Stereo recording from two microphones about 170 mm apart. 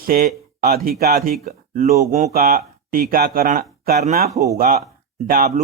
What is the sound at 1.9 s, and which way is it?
Speech, 45° right (ahead or behind).